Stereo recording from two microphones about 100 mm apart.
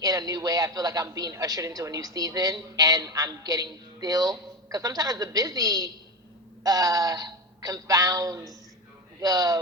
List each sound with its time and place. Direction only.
0.0 s a man's voice: 35° right (ahead or behind)